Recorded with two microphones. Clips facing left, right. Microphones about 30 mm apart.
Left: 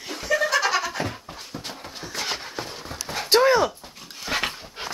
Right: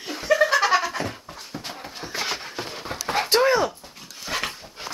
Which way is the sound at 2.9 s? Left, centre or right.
Right.